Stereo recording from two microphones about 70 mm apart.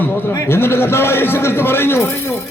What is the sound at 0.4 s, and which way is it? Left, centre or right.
A man's voice, left.